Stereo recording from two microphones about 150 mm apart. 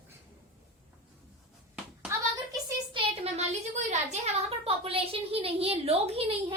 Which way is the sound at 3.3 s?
50° right (ahead or behind).